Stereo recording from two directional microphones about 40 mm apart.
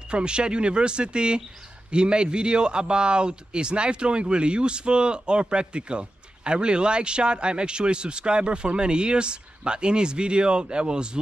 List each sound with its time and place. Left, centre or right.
0.1 s a man's voice: right